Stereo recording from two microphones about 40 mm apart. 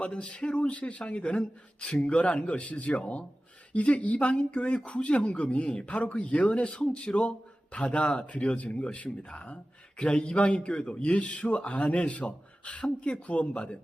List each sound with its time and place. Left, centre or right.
0.0 s a man's voice: left
4.4 s speech: left
8.3 s a man's voice: left